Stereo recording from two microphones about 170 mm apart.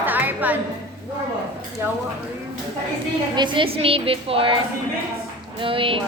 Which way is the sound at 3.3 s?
30° right (ahead or behind).